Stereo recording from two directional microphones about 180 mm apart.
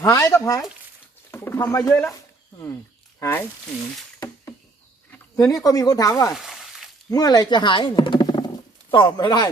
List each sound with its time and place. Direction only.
0.0 s speech: 20° left (ahead or behind)
3.2 s speech: 15° left (ahead or behind)
5.1 s a sound: 20° left (ahead or behind)
5.6 s speech: 20° left (ahead or behind)
6.3 s frying: centre (ahead or behind)
7.1 s speech: 20° left (ahead or behind)